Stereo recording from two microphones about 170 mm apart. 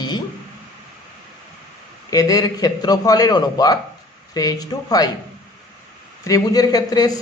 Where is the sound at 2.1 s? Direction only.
20° left (ahead or behind).